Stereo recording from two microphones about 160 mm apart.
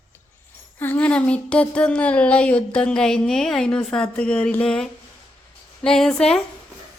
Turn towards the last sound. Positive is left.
turn(degrees=5)  # may be behind; listen again after turning